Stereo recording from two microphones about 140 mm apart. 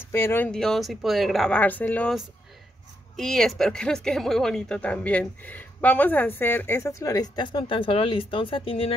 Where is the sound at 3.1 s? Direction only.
5° left (ahead or behind).